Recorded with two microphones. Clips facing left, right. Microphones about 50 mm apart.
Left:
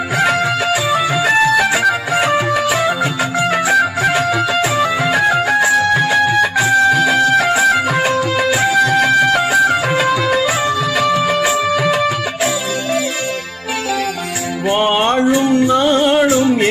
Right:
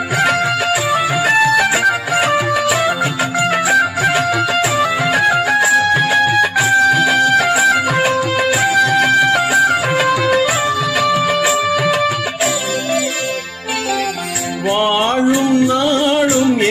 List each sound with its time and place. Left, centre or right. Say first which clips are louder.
0.7 s music: even; centre
3.3 s music: even; centre
8.6 s music: even; right
9.2 s music: even; centre
11.4 s music: even; centre
15.7 s music: left 2 dB; left